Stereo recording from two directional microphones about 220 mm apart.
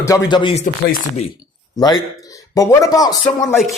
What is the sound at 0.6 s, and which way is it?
Speech, 35° left (ahead or behind).